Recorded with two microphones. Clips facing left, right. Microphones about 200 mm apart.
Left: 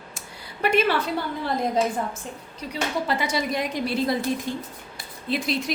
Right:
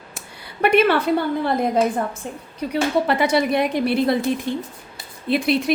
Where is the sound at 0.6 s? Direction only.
60° right (ahead or behind).